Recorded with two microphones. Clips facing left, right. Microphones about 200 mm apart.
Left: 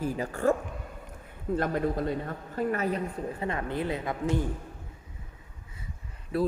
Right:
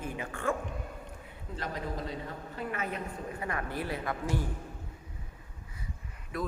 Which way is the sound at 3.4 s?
25° left (ahead or behind).